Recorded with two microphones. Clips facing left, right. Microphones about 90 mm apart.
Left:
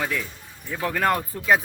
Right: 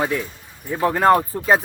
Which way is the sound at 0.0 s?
35° right (ahead or behind).